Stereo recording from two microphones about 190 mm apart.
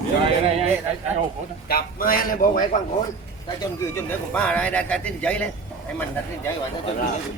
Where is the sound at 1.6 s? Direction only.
50° left (ahead or behind).